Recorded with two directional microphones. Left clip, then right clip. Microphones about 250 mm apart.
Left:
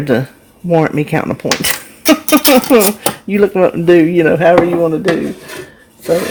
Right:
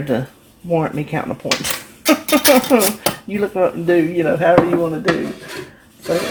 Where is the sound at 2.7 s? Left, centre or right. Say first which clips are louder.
Left 5 dB; left.